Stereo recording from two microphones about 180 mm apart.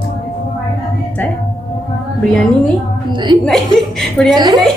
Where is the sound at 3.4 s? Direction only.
Centre (ahead or behind).